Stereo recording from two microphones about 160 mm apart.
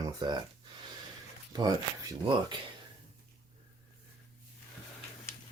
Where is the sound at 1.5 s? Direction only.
25° right (ahead or behind).